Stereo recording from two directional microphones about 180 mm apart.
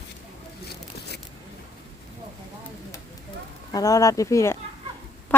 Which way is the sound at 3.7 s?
20° left (ahead or behind).